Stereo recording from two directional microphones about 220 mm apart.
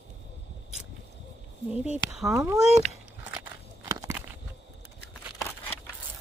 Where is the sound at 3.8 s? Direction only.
15° right (ahead or behind).